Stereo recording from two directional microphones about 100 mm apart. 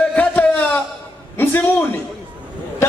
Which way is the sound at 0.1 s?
15° left (ahead or behind).